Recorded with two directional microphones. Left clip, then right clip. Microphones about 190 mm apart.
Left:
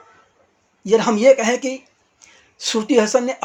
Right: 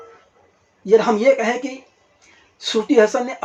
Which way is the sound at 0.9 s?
30° left (ahead or behind).